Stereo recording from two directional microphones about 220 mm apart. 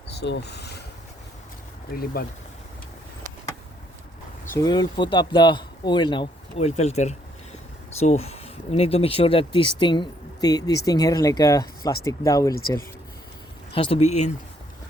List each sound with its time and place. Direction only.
0.2 s speech: 50° left (ahead or behind)
4.5 s speech: 20° left (ahead or behind)
13.7 s speech: 25° left (ahead or behind)